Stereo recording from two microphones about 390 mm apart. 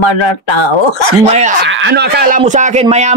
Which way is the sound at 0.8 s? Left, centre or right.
Left.